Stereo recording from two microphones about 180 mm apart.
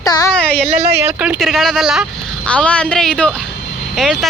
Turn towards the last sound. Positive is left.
turn(degrees=0)  # may be behind; listen again after turning